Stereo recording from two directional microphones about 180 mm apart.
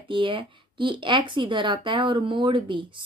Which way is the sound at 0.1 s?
30° right (ahead or behind).